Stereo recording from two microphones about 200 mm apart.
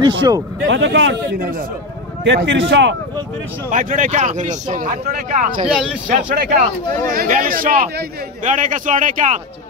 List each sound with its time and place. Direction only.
0.0 s speech: 25° right (ahead or behind)
0.7 s a man's voice: 65° right (ahead or behind)
3.7 s a man's voice: 40° right (ahead or behind)